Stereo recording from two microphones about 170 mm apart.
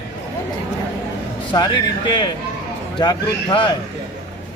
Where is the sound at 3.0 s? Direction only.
25° left (ahead or behind).